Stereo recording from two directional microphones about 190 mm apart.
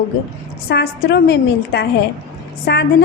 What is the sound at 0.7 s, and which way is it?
A woman's voice, 60° left (ahead or behind).